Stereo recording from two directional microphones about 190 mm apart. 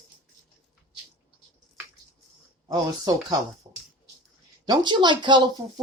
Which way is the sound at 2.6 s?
20° right (ahead or behind).